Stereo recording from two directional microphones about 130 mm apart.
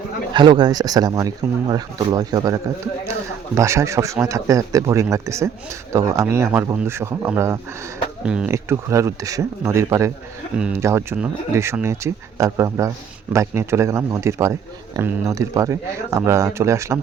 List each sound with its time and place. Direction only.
0.3 s a man's voice: 35° right (ahead or behind); by 7.6 s 20° right (ahead or behind)
8.2 s speech: 5° right (ahead or behind)
8.4 s a man's voice: 20° right (ahead or behind)